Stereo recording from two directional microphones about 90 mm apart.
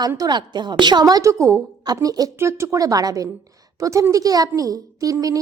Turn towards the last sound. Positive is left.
turn(degrees=-40)  # may be behind; listen again after turning